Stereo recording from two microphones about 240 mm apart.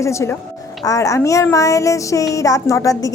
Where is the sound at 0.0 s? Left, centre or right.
Centre.